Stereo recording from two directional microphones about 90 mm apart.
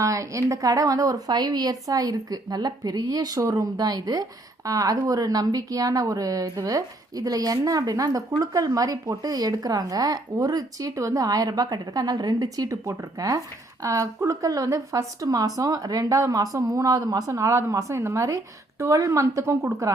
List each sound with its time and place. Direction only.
0.0 s speech: 35° right (ahead or behind)